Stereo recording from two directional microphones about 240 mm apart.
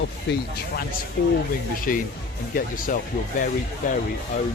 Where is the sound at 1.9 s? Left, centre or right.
Left.